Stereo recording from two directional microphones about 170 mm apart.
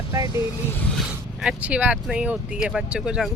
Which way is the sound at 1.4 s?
5° right (ahead or behind).